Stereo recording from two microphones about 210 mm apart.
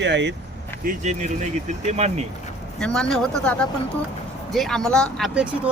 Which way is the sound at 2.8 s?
5° left (ahead or behind).